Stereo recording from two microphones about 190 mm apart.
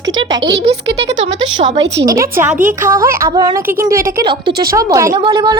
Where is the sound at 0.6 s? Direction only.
35° right (ahead or behind).